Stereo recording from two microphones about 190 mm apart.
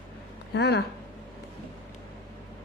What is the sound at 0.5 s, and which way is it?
Speech, 60° left (ahead or behind).